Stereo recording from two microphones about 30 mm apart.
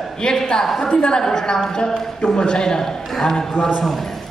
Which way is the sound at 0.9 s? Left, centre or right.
Left.